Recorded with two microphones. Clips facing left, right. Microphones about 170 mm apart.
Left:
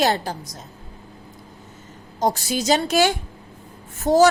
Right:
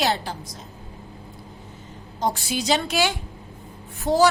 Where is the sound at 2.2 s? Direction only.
40° left (ahead or behind).